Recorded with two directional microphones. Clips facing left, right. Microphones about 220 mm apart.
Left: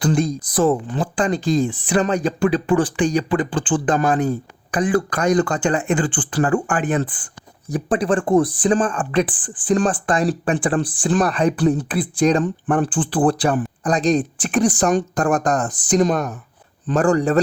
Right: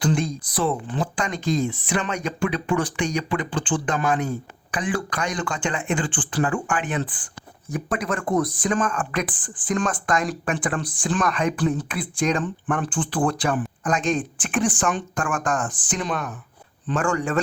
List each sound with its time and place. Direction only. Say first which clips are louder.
0.0 s speech: left 4 dB; 40° left (ahead or behind)
1.0 s speech: left 7 dB; 30° left (ahead or behind)